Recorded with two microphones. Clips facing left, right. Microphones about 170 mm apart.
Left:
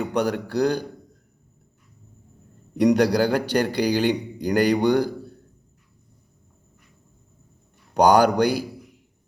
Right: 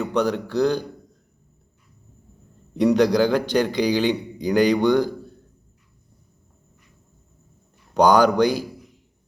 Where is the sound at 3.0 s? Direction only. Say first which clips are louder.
Right 2 dB; 10° left (ahead or behind).